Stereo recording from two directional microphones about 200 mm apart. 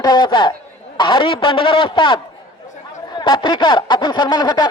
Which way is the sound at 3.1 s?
20° left (ahead or behind).